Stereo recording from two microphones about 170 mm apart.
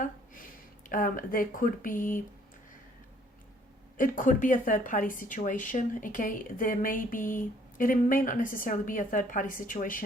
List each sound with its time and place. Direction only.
0.9 s speech: 55° left (ahead or behind)
3.9 s speech: 55° left (ahead or behind)